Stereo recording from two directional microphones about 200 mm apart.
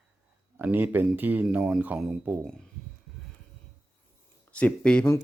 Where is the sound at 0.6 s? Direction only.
10° right (ahead or behind).